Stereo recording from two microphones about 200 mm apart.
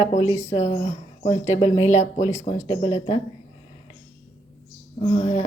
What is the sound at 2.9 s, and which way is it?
Speech, 35° left (ahead or behind).